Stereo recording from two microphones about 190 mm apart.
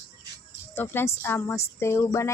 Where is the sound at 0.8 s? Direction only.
10° left (ahead or behind).